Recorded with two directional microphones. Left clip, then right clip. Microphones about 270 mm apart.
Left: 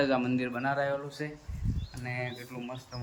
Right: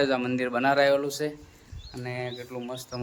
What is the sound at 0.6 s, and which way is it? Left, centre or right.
Speech, right.